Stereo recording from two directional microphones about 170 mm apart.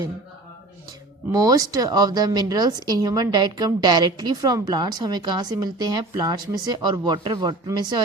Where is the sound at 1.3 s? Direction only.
20° right (ahead or behind).